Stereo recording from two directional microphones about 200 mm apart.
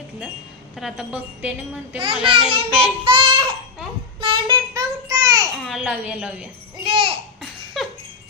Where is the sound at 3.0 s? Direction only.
25° right (ahead or behind).